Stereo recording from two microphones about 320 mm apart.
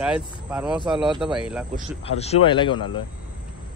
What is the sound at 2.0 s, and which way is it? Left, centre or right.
A man's voice, centre.